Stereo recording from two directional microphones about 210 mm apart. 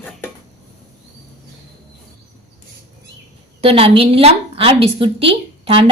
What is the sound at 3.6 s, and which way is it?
A woman's voice, 25° right (ahead or behind).